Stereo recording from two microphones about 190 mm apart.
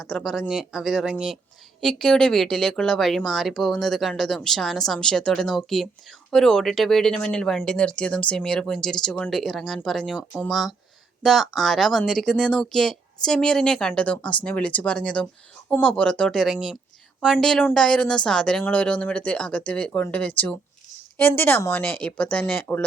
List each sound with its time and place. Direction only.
0.0 s speech: centre (ahead or behind)